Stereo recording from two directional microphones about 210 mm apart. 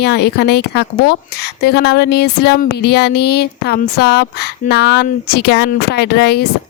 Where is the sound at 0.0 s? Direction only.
50° left (ahead or behind).